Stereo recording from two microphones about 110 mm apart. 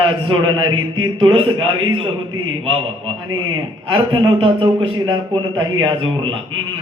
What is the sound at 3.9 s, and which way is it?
A man's voice, 50° right (ahead or behind).